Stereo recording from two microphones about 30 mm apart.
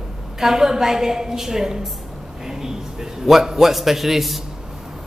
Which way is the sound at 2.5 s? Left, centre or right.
Centre.